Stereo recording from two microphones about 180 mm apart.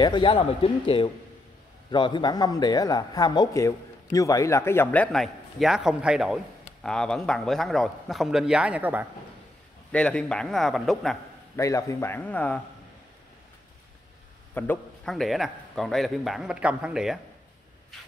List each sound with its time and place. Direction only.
0.0 s a man's voice: 25° left (ahead or behind); by 9.0 s 10° right (ahead or behind)
9.9 s a man's voice: 5° left (ahead or behind)
11.5 s a man's voice: 15° left (ahead or behind)
14.5 s a man's voice: 10° left (ahead or behind)